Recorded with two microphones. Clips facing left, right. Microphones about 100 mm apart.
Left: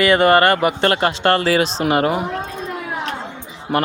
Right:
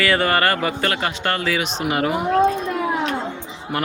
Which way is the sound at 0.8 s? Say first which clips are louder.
Left 6 dB; 35° left (ahead or behind).